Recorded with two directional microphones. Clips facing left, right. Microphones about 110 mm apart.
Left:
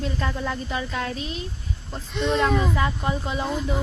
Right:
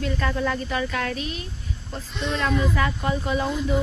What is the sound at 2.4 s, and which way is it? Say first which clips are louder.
Speech: left 1 dB; 25° left (ahead or behind).